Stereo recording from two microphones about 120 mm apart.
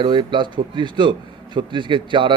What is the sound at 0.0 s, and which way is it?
A man's voice, 40° right (ahead or behind).